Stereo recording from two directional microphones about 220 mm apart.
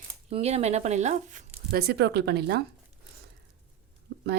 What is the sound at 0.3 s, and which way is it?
Speech, 30° right (ahead or behind).